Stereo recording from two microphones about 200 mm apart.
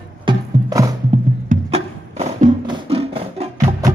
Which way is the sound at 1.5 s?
35° right (ahead or behind).